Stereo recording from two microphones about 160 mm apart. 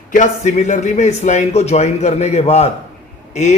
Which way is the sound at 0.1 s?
50° left (ahead or behind).